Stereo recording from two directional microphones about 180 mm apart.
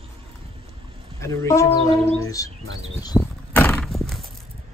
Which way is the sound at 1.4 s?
15° left (ahead or behind).